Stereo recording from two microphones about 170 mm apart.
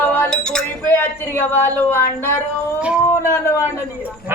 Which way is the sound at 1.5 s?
10° left (ahead or behind).